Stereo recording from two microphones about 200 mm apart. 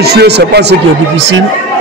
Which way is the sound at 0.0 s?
55° right (ahead or behind).